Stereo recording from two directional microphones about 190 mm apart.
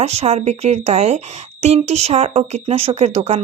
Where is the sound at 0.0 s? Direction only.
35° right (ahead or behind).